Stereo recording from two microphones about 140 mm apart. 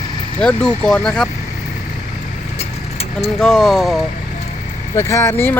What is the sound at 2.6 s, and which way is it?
Vehicle, 50° left (ahead or behind).